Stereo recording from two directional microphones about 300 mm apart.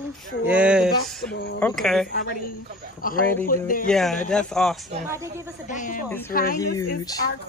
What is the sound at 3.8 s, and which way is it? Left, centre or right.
Speech, centre.